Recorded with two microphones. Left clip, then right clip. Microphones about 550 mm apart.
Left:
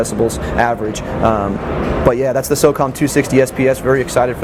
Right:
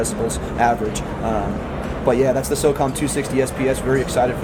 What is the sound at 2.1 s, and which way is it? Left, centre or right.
Speech, left.